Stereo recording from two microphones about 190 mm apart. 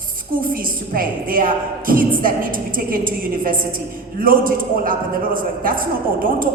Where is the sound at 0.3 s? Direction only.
50° right (ahead or behind).